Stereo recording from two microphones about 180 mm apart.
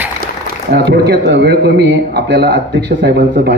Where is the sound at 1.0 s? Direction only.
65° right (ahead or behind).